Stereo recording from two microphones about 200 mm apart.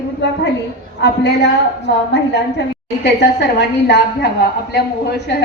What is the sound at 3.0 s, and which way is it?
Speech, 55° left (ahead or behind).